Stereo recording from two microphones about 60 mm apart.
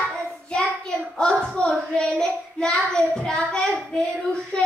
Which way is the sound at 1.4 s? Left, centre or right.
Centre.